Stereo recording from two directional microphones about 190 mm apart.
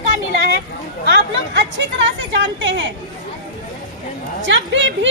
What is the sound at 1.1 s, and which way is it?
A woman's voice, 60° right (ahead or behind).